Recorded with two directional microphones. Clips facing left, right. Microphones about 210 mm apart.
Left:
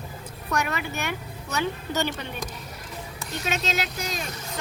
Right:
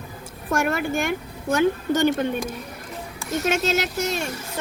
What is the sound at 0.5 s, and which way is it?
Speech, 50° right (ahead or behind).